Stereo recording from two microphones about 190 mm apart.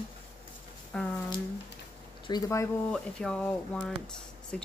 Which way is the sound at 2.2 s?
20° left (ahead or behind).